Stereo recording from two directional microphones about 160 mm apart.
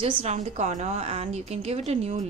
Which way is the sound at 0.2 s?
45° right (ahead or behind).